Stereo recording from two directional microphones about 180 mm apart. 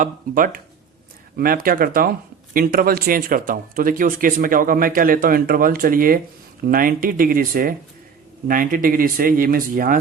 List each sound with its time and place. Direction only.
0.0 s speech: 50° right (ahead or behind)